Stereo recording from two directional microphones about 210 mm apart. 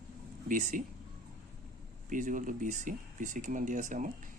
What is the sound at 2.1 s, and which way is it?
Speech, 40° right (ahead or behind).